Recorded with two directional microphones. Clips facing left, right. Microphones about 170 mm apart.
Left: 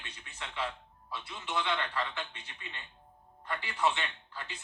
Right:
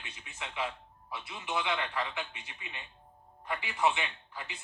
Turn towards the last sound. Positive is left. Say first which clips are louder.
# even
turn(degrees=-15)  # may be behind; listen again after turning